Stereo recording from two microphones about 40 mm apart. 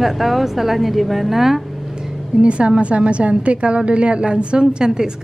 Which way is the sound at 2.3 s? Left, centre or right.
Right.